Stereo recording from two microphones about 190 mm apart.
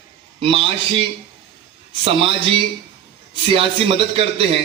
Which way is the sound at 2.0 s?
30° right (ahead or behind).